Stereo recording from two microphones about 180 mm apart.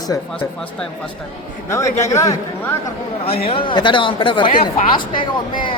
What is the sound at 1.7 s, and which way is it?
Speech, 15° left (ahead or behind).